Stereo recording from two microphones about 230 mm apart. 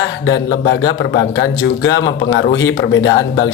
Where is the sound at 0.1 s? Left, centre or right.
Left.